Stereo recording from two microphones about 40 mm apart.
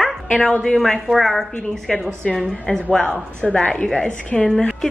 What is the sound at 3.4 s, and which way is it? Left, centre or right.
Speech, centre.